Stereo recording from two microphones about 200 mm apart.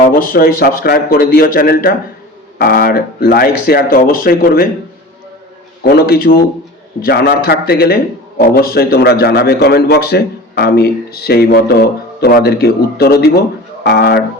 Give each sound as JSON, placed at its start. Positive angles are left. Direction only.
{"t": 0.0, "sound": "a man's voice", "side_deg": 45}
{"t": 5.8, "sound": "a man's voice", "side_deg": 50}